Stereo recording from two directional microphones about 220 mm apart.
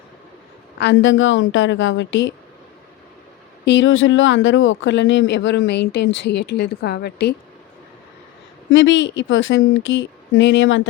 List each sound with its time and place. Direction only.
0.8 s speech: 55° left (ahead or behind)
3.7 s speech: 55° left (ahead or behind)
8.7 s speech: 55° left (ahead or behind)